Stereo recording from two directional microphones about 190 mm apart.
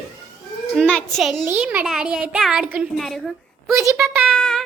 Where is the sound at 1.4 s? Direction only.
10° right (ahead or behind).